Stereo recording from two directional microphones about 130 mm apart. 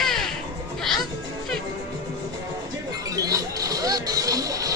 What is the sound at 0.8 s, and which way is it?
Music, 5° left (ahead or behind).